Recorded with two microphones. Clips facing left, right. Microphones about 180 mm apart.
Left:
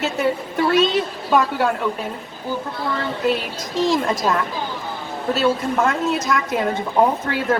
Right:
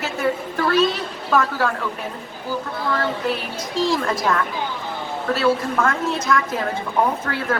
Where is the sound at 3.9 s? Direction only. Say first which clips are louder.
Left 1 dB; 20° left (ahead or behind).